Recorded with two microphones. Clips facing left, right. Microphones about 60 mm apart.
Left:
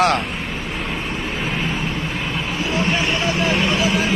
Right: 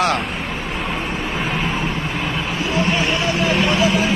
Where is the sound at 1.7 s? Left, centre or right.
Right.